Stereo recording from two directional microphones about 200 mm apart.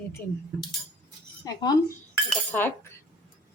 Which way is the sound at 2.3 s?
5° left (ahead or behind).